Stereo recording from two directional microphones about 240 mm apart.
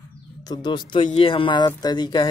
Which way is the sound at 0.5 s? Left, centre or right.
Centre.